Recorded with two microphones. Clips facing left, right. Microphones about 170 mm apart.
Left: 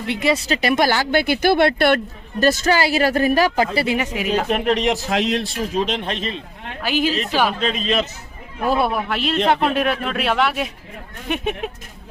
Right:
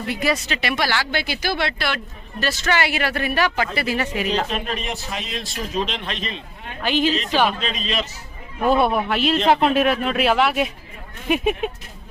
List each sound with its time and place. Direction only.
0.1 s speech: 25° left (ahead or behind)
0.5 s speech: 45° left (ahead or behind)
2.4 s speech: 40° left (ahead or behind)
3.8 s speech: 15° left (ahead or behind)
4.4 s speech: 65° left (ahead or behind); by 5.5 s 80° left
5.8 s speech: 45° left (ahead or behind)
6.8 s speech: 10° left (ahead or behind)
7.6 s speech: 50° left (ahead or behind)
8.6 s speech: centre (ahead or behind)